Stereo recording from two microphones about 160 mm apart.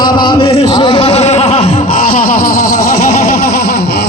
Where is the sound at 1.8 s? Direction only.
60° left (ahead or behind).